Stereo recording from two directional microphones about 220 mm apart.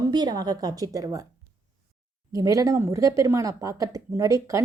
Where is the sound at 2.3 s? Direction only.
15° right (ahead or behind).